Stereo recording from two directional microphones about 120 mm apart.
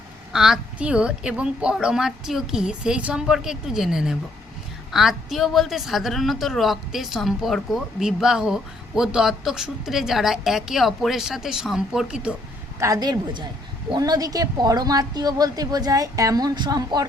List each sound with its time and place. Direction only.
0.3 s a woman's voice: 5° right (ahead or behind)
12.8 s a woman's voice: 30° right (ahead or behind)